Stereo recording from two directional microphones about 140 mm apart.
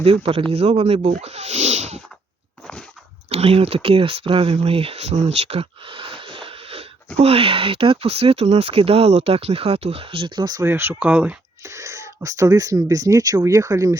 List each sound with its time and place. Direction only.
0.0 s speech: 45° right (ahead or behind)
3.2 s speech: 45° right (ahead or behind); by 10.7 s 30° right (ahead or behind)
10.7 s speech: 15° right (ahead or behind)
11.6 s speech: 20° right (ahead or behind)